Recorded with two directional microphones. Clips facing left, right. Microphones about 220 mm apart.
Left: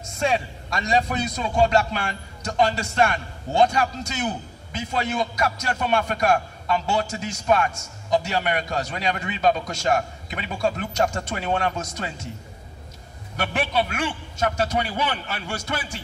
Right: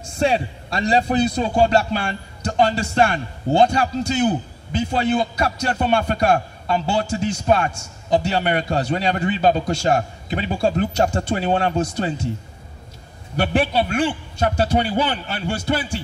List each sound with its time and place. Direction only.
0.0 s a man's voice: 30° right (ahead or behind)
13.4 s a man's voice: 30° right (ahead or behind)